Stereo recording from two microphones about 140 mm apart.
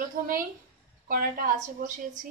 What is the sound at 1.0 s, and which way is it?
Speech, 75° right (ahead or behind).